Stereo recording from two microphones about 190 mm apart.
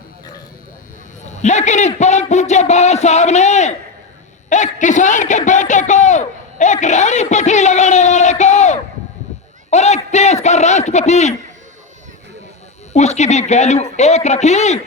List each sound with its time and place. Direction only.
1.2 s a man's voice: 40° left (ahead or behind)
12.9 s a man's voice: 35° left (ahead or behind)